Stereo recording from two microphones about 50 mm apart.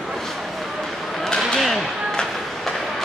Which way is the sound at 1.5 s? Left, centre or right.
Centre.